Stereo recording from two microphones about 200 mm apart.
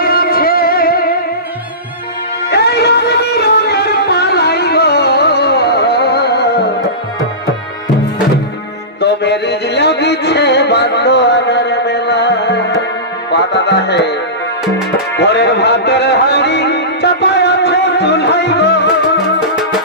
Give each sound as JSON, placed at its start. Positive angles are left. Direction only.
{"t": 0.0, "sound": "music", "side_deg": 50}
{"t": 2.5, "sound": "music", "side_deg": 55}
{"t": 9.0, "sound": "a sound", "side_deg": 55}
{"t": 13.3, "sound": "music", "side_deg": 60}
{"t": 15.2, "sound": "music", "side_deg": 60}